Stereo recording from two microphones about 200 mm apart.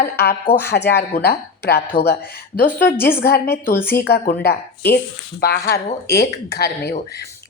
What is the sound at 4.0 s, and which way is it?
Speech, 55° left (ahead or behind).